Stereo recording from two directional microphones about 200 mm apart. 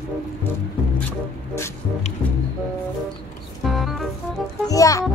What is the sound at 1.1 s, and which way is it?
Speech, 15° left (ahead or behind).